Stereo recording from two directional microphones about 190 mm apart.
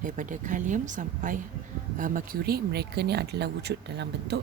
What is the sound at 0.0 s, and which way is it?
Speech, 45° right (ahead or behind).